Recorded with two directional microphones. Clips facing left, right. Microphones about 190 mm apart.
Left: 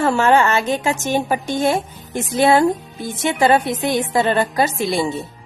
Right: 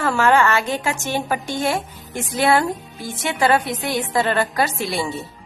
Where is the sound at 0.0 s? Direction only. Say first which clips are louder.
Left 2 dB; 25° left (ahead or behind).